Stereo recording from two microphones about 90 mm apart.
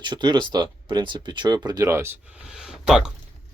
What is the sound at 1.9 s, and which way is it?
Speech, 30° right (ahead or behind).